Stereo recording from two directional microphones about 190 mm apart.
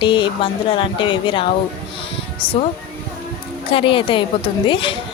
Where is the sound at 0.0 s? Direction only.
25° left (ahead or behind).